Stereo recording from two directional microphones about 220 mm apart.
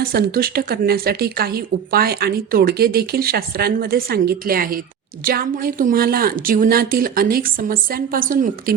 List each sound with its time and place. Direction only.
0.0 s speech: 45° right (ahead or behind)